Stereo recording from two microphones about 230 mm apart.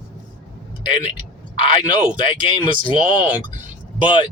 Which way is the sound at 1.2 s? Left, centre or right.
Left.